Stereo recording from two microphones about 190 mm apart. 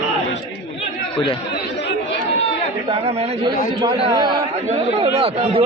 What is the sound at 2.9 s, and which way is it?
Speech, 30° right (ahead or behind).